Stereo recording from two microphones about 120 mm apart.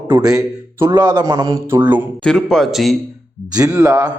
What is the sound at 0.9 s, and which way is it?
Speech, 35° right (ahead or behind).